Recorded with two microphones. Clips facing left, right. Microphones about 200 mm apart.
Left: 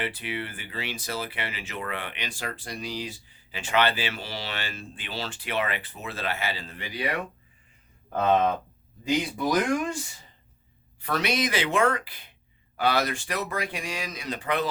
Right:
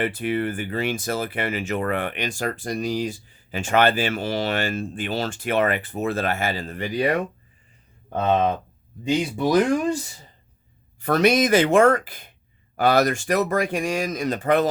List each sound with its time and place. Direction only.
0.0 s speech: 50° right (ahead or behind)
8.1 s speech: 25° right (ahead or behind); by 14.7 s 45° right (ahead or behind)